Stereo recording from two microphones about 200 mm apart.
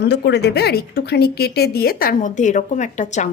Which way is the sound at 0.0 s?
55° left (ahead or behind).